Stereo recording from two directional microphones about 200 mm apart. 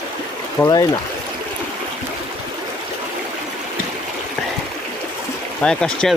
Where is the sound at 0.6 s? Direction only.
20° left (ahead or behind).